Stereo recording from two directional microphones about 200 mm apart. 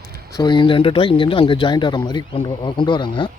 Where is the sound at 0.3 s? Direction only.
20° left (ahead or behind).